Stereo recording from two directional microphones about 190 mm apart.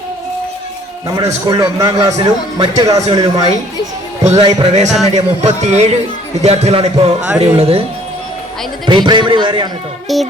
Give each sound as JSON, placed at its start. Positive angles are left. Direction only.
{"t": 1.0, "sound": "a man's voice", "side_deg": -20}
{"t": 5.1, "sound": "music", "side_deg": -35}
{"t": 8.9, "sound": "a man's voice", "side_deg": -25}
{"t": 10.1, "sound": "music", "side_deg": 0}